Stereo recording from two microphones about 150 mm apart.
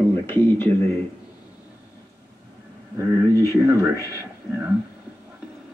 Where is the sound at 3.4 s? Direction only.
20° right (ahead or behind).